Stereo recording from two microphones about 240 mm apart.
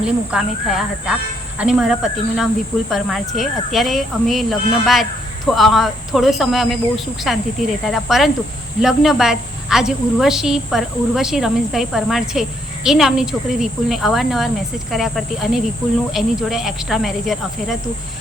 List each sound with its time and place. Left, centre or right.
0.0 s a woman's voice: centre